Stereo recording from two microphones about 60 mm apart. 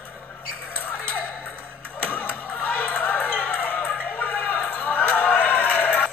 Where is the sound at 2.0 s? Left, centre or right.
Left.